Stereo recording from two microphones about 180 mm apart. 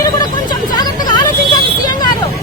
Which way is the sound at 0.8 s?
25° left (ahead or behind).